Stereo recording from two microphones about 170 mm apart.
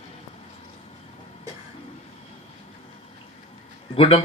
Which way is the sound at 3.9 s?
30° left (ahead or behind).